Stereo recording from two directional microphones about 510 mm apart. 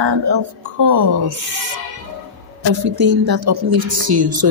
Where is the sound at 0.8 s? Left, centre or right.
Right.